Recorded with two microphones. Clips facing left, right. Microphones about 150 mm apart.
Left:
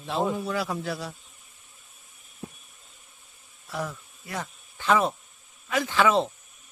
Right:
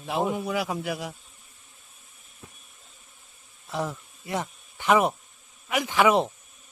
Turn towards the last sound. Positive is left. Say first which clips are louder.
# right 1 dB
turn(degrees=-15)  # may be behind; listen again after turning